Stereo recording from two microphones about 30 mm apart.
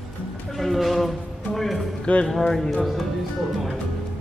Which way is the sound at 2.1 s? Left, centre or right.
Left.